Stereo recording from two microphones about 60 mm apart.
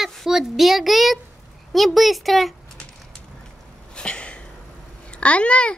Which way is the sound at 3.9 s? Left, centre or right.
Centre.